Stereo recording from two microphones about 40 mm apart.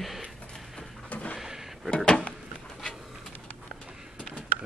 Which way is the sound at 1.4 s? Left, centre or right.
Centre.